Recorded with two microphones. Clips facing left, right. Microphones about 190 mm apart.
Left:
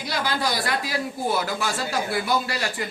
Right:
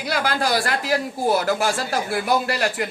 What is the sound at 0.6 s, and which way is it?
Speech, 75° right (ahead or behind).